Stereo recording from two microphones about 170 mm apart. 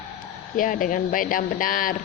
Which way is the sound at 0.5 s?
50° left (ahead or behind).